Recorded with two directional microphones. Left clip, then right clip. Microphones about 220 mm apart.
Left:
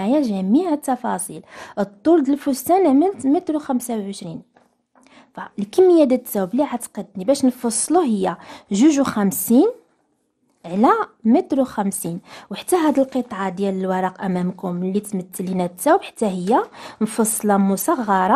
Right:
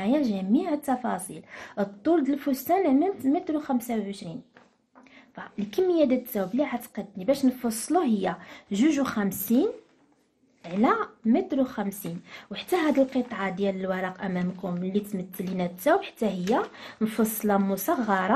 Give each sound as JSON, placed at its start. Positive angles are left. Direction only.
{"t": 0.0, "sound": "speech", "side_deg": 45}